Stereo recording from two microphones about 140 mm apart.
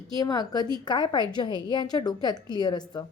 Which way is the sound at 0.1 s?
30° left (ahead or behind).